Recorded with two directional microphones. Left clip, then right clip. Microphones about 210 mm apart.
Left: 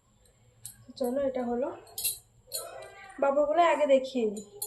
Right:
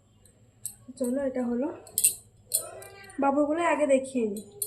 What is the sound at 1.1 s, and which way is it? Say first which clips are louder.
Speech: even; centre (ahead or behind).